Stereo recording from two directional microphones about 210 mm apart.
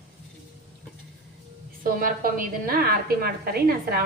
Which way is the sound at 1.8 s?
40° right (ahead or behind).